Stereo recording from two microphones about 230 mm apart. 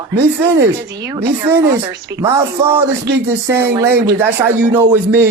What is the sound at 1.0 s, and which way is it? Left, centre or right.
Speech, centre.